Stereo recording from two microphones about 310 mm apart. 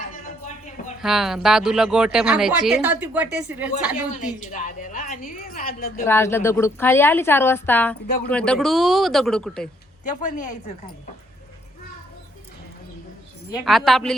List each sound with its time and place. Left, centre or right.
0.0 s a sound: left
1.0 s speech: centre
4.1 s a woman's voice: left
6.1 s a woman's voice: centre
8.0 s a woman's voice: left
8.3 s speech: centre
10.0 s a woman's voice: left
13.7 s speech: centre